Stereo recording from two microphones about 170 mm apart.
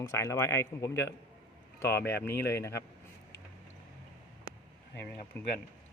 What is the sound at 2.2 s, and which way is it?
Speech, 15° left (ahead or behind).